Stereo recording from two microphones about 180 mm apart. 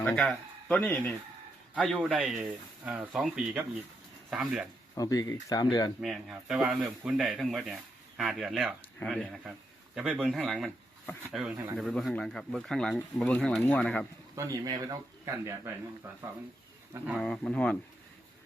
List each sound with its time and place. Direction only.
0.0 s speech: 5° left (ahead or behind)
4.9 s speech: 20° left (ahead or behind)
6.0 s speech: centre (ahead or behind)
14.3 s speech: 20° right (ahead or behind)
17.1 s speech: 5° left (ahead or behind)